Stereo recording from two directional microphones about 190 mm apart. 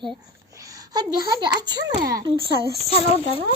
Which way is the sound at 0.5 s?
20° right (ahead or behind).